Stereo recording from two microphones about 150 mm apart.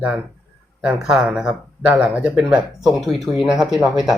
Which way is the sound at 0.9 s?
5° right (ahead or behind).